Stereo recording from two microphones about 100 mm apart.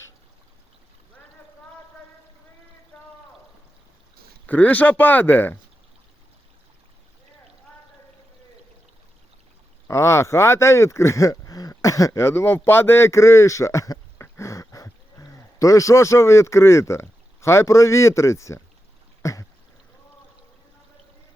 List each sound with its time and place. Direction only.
2.9 s pour: 20° left (ahead or behind)
4.4 s speech: 15° left (ahead or behind)
9.8 s speech: 30° left (ahead or behind)
19.2 s a sound: 35° left (ahead or behind)